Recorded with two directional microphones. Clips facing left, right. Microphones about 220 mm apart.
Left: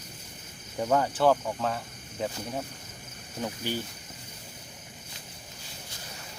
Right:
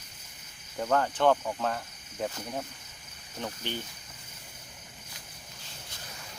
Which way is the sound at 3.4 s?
10° left (ahead or behind).